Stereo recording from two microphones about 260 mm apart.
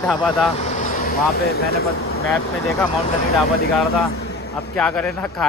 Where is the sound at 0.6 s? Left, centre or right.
Left.